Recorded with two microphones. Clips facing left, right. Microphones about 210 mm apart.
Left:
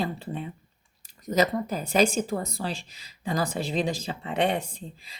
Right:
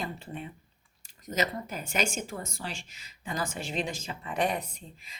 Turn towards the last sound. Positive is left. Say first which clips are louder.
# left 7 dB
turn(degrees=30)  # may be behind; listen again after turning